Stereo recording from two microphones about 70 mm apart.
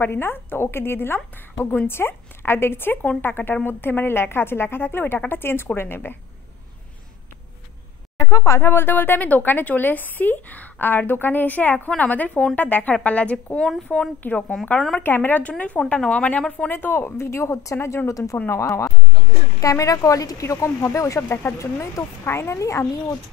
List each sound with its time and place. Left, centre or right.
0.0 s a woman's voice: left
8.3 s a woman's voice: left; by 15.0 s centre
15.0 s a woman's voice: left
16.7 s a woman's voice: left
19.6 s speech: left
21.2 s a woman's voice: left